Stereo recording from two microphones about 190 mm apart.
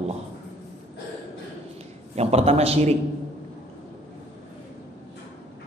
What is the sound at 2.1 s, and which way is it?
Speech, 35° right (ahead or behind).